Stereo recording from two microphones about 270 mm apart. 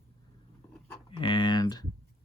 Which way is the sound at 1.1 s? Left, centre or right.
Centre.